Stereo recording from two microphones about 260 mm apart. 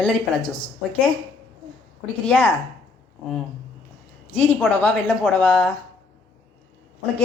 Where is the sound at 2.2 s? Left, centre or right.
Centre.